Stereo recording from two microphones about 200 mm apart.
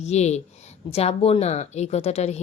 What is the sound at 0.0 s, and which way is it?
A woman's voice, 35° left (ahead or behind).